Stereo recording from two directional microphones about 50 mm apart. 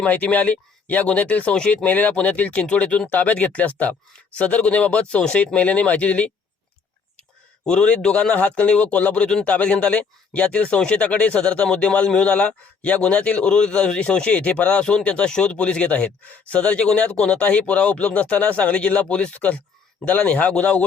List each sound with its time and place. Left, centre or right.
0.1 s speech: left
7.6 s speech: centre